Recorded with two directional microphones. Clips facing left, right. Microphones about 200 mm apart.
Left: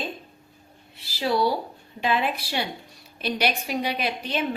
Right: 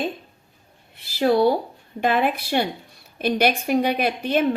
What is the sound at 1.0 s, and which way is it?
A woman's voice, 55° right (ahead or behind).